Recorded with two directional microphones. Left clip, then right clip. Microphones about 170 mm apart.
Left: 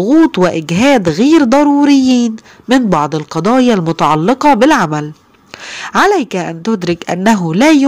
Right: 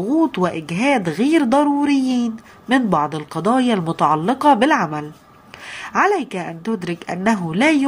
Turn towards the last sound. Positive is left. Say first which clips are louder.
# left 7 dB
turn(degrees=40)  # may be behind; listen again after turning